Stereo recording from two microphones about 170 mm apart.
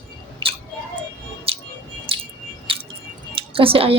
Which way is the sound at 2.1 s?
35° right (ahead or behind).